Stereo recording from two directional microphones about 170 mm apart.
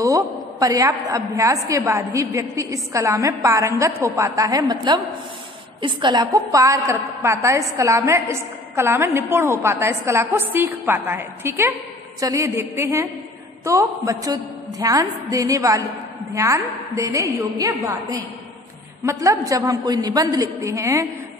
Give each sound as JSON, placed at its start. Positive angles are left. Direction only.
{"t": 0.0, "sound": "a woman's voice", "side_deg": -20}